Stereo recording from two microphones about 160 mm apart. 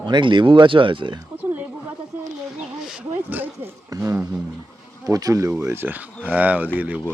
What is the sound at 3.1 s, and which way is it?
Speech, 15° right (ahead or behind).